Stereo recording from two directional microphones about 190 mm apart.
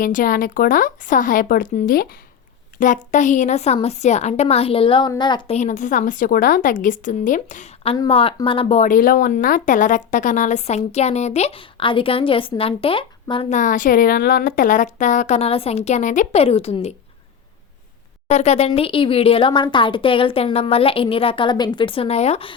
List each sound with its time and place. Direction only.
0.0 s a woman's voice: 45° left (ahead or behind); by 5.5 s 25° left (ahead or behind)
5.5 s a woman's voice: 40° left (ahead or behind)
7.9 s speech: 25° left (ahead or behind)
13.5 s speech: 45° left (ahead or behind)
18.3 s speech: 35° left (ahead or behind)